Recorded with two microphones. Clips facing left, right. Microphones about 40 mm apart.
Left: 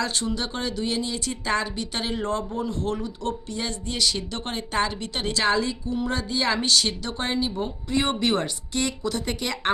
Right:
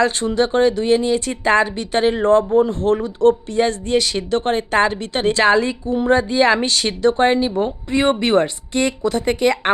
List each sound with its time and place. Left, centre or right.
0.0 s speech: right